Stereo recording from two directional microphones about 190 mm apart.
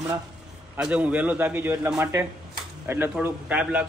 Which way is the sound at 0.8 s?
5° right (ahead or behind).